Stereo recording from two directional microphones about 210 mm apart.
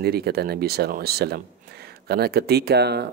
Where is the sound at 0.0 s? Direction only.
50° right (ahead or behind).